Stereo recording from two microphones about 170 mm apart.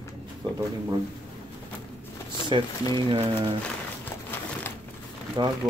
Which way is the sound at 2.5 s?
30° right (ahead or behind).